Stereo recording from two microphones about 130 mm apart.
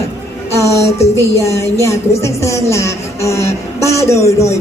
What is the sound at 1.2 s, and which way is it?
A man's voice, 20° left (ahead or behind).